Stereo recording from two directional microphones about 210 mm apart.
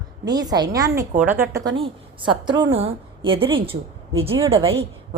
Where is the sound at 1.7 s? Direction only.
25° right (ahead or behind).